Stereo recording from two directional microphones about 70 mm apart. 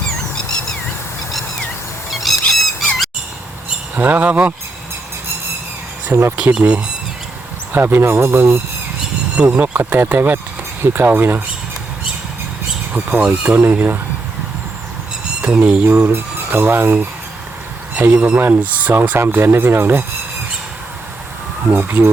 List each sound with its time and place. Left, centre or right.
2.3 s squawk: centre
3.9 s speech: right
6.1 s speech: right
6.3 s speech: centre
7.7 s speech: right
9.3 s speech: centre
9.7 s speech: right
12.9 s speech: right
15.4 s speech: right
15.9 s a sound: right
17.9 s speech: right
21.7 s speech: right